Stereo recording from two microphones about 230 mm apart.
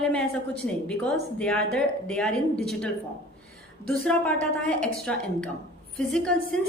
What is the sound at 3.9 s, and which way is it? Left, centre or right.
A woman's voice, centre.